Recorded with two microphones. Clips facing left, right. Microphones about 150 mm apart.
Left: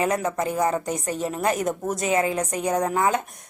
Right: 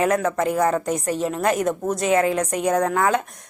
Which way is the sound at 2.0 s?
40° right (ahead or behind).